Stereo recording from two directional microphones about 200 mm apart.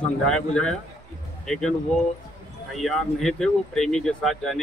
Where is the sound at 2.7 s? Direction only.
Centre (ahead or behind).